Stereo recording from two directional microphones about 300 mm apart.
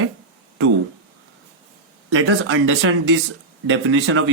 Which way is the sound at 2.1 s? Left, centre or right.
Right.